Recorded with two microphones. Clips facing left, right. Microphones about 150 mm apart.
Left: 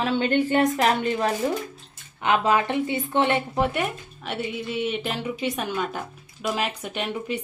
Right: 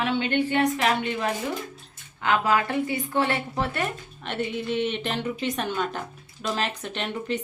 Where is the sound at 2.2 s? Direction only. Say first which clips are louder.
Left 2 dB; 20° left (ahead or behind).